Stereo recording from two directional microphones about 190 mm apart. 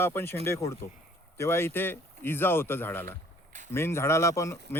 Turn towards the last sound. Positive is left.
turn(degrees=15)  # may be behind; listen again after turning